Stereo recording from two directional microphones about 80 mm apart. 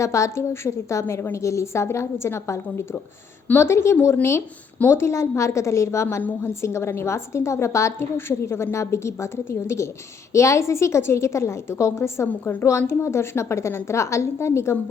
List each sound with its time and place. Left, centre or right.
0.0 s a woman's voice: left